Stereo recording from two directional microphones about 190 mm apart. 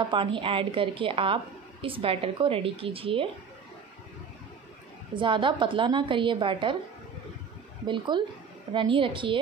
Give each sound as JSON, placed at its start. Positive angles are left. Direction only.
{"t": 0.0, "sound": "a woman's voice", "side_deg": -25}
{"t": 5.1, "sound": "a woman's voice", "side_deg": -25}
{"t": 7.8, "sound": "a woman's voice", "side_deg": -25}